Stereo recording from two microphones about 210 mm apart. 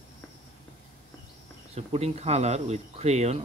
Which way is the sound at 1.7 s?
30° right (ahead or behind).